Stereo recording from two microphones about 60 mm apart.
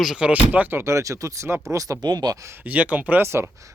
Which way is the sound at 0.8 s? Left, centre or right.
Right.